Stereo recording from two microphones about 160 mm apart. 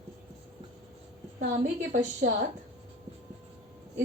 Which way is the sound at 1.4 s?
50° right (ahead or behind).